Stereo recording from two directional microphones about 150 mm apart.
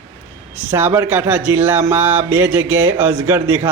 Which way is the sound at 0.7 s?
15° right (ahead or behind).